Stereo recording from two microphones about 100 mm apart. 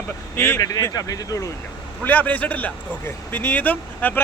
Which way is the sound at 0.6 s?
35° left (ahead or behind).